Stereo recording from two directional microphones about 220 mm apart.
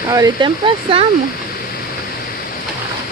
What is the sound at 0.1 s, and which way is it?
Speech, 20° right (ahead or behind).